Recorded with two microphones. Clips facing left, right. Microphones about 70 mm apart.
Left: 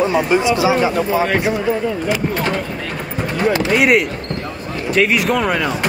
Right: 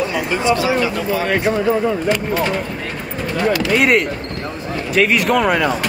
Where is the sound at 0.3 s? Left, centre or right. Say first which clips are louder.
Left 2 dB; centre.